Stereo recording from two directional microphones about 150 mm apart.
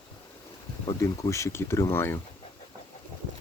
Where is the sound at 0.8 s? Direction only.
20° left (ahead or behind).